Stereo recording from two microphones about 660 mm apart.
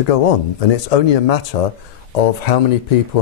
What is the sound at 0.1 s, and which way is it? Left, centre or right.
Speech, left.